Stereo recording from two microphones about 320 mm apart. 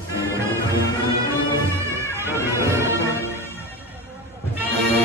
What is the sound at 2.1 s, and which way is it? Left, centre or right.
Bagpipes, centre.